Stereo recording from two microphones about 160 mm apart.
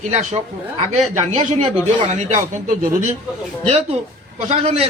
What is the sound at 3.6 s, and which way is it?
A man's voice, 40° right (ahead or behind).